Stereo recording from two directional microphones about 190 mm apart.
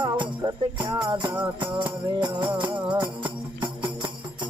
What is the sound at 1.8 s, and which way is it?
Music, 25° right (ahead or behind).